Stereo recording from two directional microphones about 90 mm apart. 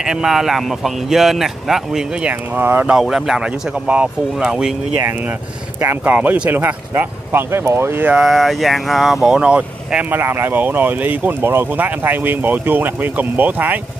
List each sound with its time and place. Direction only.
0.0 s speech: 5° right (ahead or behind)
2.2 s speech: 20° right (ahead or behind)
3.0 s speech: 5° right (ahead or behind)
5.8 s speech: 25° right (ahead or behind)
7.0 s speech: 25° right (ahead or behind)
8.1 s speech: 5° right (ahead or behind)
10.2 s speech: 25° right (ahead or behind)